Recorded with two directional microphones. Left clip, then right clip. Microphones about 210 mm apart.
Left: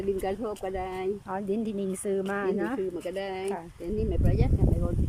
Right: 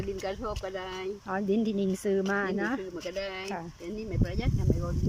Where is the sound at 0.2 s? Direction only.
20° left (ahead or behind).